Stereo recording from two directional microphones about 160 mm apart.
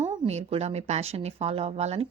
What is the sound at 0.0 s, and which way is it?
A woman's voice, 40° right (ahead or behind).